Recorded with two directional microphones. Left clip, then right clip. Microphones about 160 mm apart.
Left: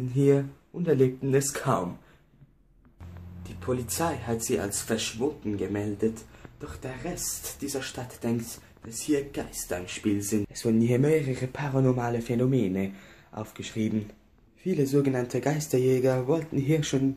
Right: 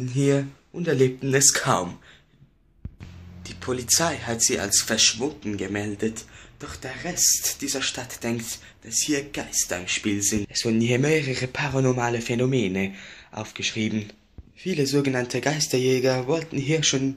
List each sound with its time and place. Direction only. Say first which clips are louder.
0.0 s speech: even; 10° right (ahead or behind)
3.4 s speech: right 5 dB; 5° right (ahead or behind)